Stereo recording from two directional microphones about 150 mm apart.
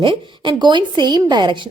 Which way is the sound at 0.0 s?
30° right (ahead or behind).